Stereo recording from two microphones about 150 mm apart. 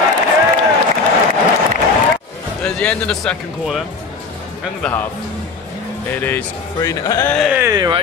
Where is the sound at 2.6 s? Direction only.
5° left (ahead or behind).